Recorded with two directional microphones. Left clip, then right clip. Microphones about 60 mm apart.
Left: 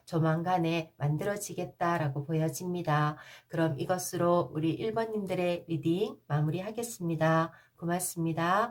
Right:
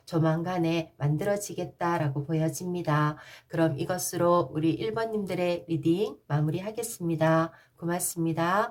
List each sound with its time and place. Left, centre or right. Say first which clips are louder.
0.1 s speech: right 1 dB; centre